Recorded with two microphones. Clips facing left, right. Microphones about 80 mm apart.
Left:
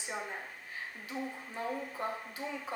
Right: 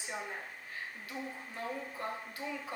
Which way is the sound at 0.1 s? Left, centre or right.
Centre.